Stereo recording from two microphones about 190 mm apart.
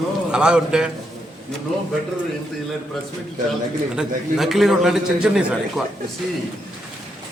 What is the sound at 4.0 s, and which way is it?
A man's voice, centre (ahead or behind).